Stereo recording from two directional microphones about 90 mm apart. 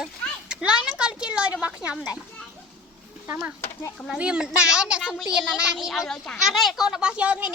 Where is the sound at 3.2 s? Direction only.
20° right (ahead or behind).